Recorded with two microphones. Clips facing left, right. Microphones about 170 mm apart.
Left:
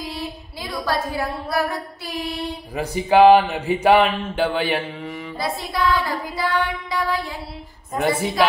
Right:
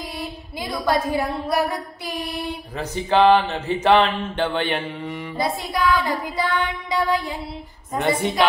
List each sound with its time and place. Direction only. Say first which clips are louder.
0.8 s a woman's voice: right 3 dB; 20° right (ahead or behind)
2.7 s speech: left 4 dB; 10° left (ahead or behind)
5.4 s child singing: right 1 dB; 20° right (ahead or behind)
8.0 s speech: left 1 dB; 5° left (ahead or behind)